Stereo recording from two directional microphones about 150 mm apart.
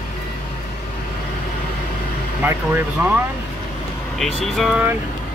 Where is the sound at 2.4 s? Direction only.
10° right (ahead or behind).